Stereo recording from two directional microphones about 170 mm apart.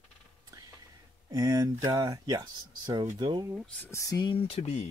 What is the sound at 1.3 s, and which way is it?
Speech, 20° right (ahead or behind).